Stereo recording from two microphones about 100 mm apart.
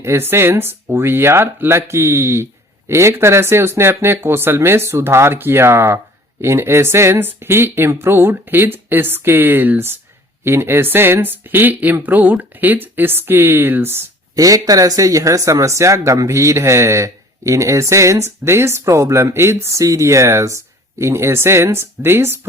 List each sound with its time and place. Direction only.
0.0 s speech: 25° right (ahead or behind)
14.3 s speech: 35° right (ahead or behind)